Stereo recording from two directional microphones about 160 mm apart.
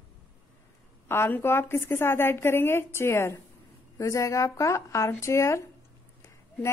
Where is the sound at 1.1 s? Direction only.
15° left (ahead or behind).